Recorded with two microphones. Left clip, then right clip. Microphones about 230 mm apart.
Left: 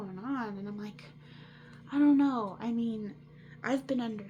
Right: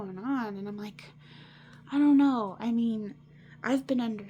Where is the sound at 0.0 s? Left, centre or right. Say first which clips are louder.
Right 4 dB; right.